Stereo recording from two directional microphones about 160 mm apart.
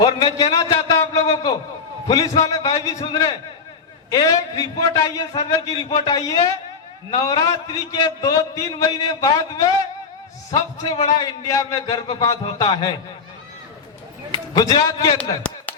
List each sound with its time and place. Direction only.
0.0 s a man's voice: 25° left (ahead or behind)
0.5 s a sound: 20° left (ahead or behind)
2.0 s a man's voice: 20° left (ahead or behind)
14.3 s a man's voice: 25° left (ahead or behind)